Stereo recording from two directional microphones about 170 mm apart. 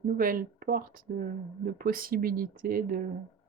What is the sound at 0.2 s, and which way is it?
Speech, 55° right (ahead or behind).